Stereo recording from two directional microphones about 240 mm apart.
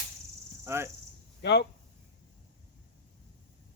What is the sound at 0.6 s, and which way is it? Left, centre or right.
Cricket, centre.